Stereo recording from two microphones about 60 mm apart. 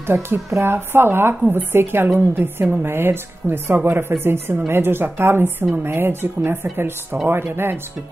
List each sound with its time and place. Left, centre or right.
0.0 s speech: right
0.5 s a woman's voice: right
0.7 s a woman's voice: right